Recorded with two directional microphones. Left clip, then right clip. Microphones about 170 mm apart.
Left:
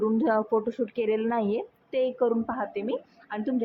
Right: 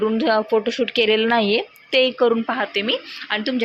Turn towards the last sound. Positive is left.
turn(degrees=-20)  # may be behind; listen again after turning